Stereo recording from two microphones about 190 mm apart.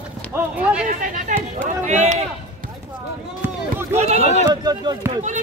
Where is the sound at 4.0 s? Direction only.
35° right (ahead or behind).